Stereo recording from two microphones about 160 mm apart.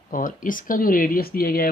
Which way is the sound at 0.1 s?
60° left (ahead or behind).